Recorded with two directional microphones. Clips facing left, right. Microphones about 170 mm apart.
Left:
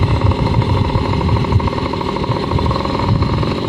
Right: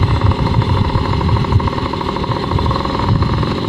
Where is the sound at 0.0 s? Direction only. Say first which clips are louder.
Even; 10° left (ahead or behind).